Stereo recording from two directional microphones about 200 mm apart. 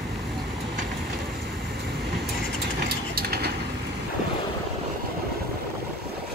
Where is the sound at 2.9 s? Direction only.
50° right (ahead or behind).